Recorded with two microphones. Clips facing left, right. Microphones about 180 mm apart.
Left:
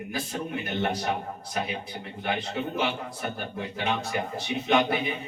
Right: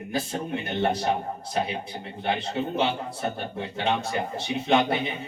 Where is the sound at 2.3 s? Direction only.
30° right (ahead or behind).